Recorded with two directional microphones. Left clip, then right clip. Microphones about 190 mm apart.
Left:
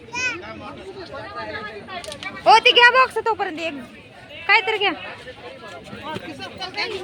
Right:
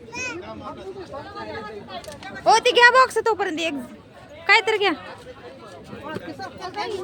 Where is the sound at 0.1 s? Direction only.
65° right (ahead or behind).